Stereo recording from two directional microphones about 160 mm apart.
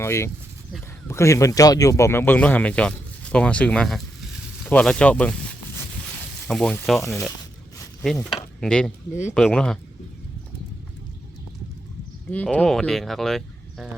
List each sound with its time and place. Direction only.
0.0 s speech: 15° left (ahead or behind)
4.6 s a sound: 5° left (ahead or behind)
6.5 s speech: 5° left (ahead or behind)
12.3 s speech: 10° left (ahead or behind)